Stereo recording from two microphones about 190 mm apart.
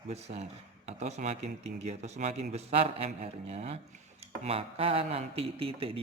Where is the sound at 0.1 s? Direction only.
35° right (ahead or behind).